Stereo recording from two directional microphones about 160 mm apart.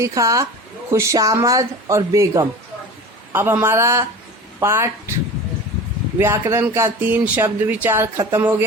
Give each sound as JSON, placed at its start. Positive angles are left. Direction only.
{"t": 0.0, "sound": "speech", "side_deg": -20}
{"t": 6.1, "sound": "speech", "side_deg": -15}